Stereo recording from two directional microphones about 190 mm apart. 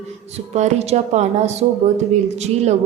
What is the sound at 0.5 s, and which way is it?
Speech, 35° right (ahead or behind).